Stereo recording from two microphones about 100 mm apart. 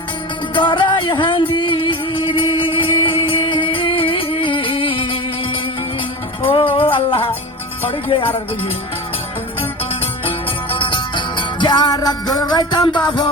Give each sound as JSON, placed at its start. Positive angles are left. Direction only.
{"t": 0.5, "sound": "music", "side_deg": 55}
{"t": 6.4, "sound": "music", "side_deg": 65}
{"t": 7.9, "sound": "speech", "side_deg": 65}
{"t": 10.7, "sound": "music", "side_deg": 60}